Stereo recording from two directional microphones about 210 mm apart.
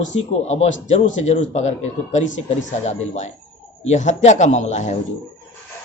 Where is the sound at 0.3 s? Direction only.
30° left (ahead or behind).